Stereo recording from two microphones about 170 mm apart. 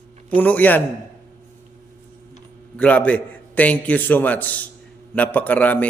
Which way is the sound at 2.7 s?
10° left (ahead or behind).